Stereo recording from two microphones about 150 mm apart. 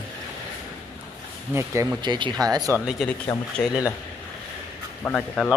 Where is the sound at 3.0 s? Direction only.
Centre (ahead or behind).